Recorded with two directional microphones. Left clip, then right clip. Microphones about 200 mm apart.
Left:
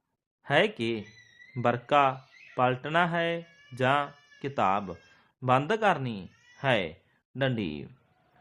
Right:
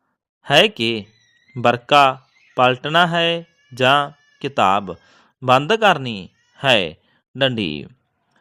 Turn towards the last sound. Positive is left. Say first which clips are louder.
# right 11 dB
turn(degrees=-40)  # may be behind; listen again after turning